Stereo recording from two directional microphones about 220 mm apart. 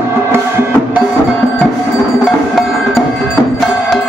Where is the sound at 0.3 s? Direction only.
10° right (ahead or behind).